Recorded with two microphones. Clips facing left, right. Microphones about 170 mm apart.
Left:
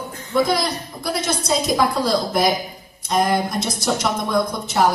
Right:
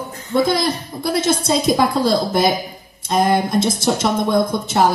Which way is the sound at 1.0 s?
25° right (ahead or behind).